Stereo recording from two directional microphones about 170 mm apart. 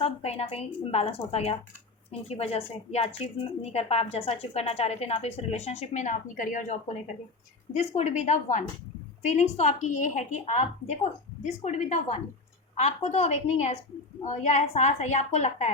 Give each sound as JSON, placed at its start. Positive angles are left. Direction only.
{"t": 0.0, "sound": "a woman's voice", "side_deg": 35}